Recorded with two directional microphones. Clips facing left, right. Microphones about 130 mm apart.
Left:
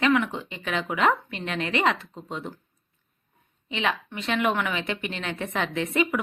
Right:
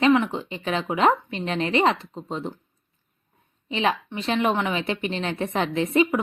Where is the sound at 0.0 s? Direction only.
30° right (ahead or behind).